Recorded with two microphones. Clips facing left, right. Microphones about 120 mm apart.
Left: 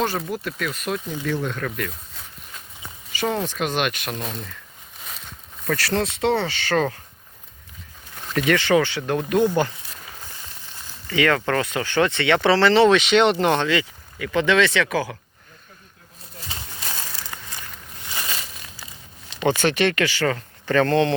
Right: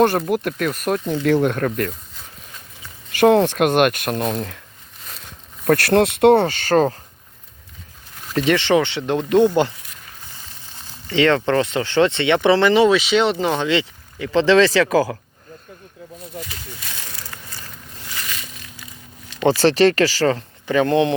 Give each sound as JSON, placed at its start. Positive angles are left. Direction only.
{"t": 0.3, "sound": "speech", "side_deg": -55}
{"t": 1.2, "sound": "speech", "side_deg": -65}
{"t": 1.6, "sound": "speech", "side_deg": -45}
{"t": 3.1, "sound": "speech", "side_deg": -65}
{"t": 5.6, "sound": "speech", "side_deg": -55}
{"t": 8.4, "sound": "speech", "side_deg": -25}
{"t": 11.1, "sound": "speech", "side_deg": -25}
{"t": 13.7, "sound": "speech", "side_deg": -25}
{"t": 16.4, "sound": "a sound", "side_deg": 35}
{"t": 19.5, "sound": "speech", "side_deg": -35}
{"t": 20.7, "sound": "speech", "side_deg": -15}